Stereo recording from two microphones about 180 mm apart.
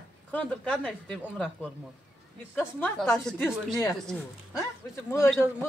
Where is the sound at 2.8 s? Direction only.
5° left (ahead or behind).